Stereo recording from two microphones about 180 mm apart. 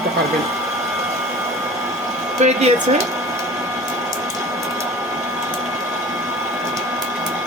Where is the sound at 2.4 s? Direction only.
40° right (ahead or behind).